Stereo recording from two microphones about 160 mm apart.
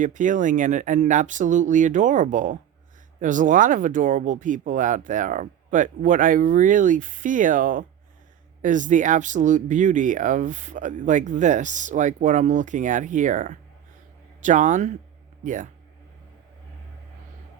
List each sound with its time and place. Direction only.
0.0 s speech: 55° right (ahead or behind)